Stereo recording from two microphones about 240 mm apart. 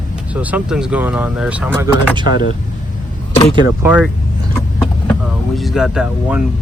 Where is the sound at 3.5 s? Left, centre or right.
Centre.